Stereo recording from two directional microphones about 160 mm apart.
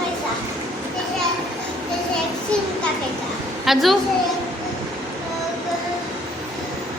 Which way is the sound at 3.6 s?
Centre (ahead or behind).